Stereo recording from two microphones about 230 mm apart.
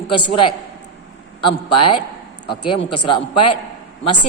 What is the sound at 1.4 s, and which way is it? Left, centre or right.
Speech, left.